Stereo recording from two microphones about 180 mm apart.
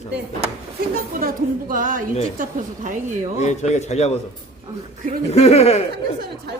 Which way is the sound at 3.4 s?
40° left (ahead or behind).